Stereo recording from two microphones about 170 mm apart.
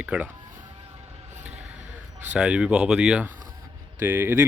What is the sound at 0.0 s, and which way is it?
Speech, 10° right (ahead or behind).